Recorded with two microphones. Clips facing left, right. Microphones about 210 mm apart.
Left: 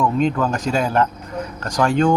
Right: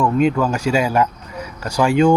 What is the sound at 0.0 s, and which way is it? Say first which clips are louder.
Speech: right 2 dB; 10° right (ahead or behind).